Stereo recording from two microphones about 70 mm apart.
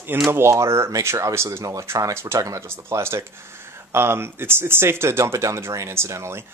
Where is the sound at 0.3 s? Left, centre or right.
Right.